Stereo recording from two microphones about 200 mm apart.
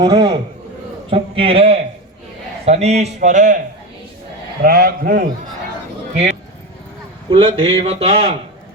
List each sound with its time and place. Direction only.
0.0 s a man's voice: 20° right (ahead or behind); by 3.6 s 35° right (ahead or behind)
4.6 s a man's voice: 50° right (ahead or behind)
7.3 s a man's voice: 30° right (ahead or behind)